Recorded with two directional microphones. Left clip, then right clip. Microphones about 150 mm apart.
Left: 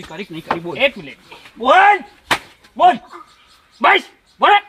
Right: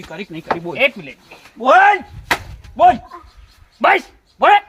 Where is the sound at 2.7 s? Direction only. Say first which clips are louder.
Right 1 dB; 5° left (ahead or behind).